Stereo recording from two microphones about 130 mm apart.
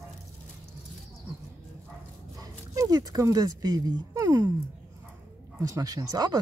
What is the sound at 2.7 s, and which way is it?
Speech, 30° right (ahead or behind).